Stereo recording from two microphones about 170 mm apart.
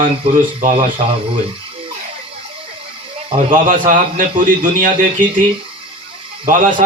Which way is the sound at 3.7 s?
50° right (ahead or behind).